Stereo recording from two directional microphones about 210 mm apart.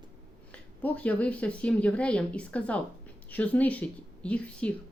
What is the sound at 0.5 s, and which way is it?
Speech, 5° left (ahead or behind).